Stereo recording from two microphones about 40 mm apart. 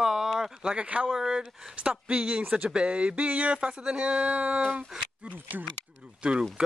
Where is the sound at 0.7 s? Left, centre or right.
Right.